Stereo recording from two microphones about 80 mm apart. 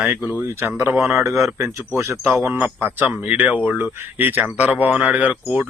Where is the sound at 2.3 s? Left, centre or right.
Right.